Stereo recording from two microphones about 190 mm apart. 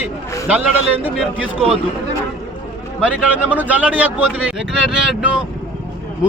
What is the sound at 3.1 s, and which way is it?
Speech, 10° right (ahead or behind).